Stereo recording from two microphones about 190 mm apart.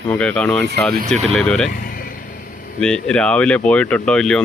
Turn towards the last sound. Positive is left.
turn(degrees=5)  # may be behind; listen again after turning